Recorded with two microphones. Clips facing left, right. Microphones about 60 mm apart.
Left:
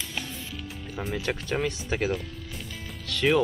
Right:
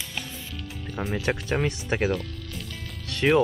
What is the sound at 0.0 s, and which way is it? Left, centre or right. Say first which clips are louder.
Music: left 1 dB; centre.